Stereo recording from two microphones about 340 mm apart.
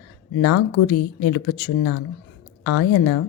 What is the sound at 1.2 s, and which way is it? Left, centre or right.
Speech, left.